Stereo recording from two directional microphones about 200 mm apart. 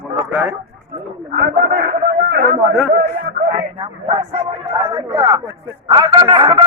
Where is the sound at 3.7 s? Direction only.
25° right (ahead or behind).